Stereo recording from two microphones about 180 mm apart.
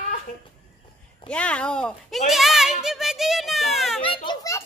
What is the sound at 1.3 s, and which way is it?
Speech, 5° left (ahead or behind).